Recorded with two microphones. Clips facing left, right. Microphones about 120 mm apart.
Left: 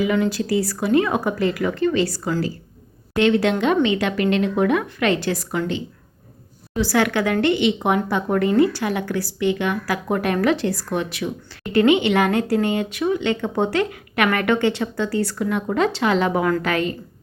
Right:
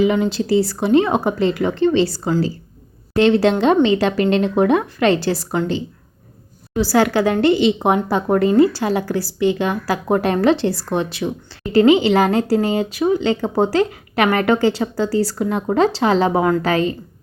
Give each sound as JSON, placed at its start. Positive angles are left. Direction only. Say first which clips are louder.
{"t": 0.0, "sound": "a woman's voice", "louder": "right 3 dB", "side_deg": -25}